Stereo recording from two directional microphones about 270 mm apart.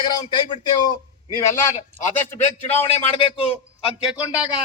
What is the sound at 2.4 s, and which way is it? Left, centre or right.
A man's voice, left.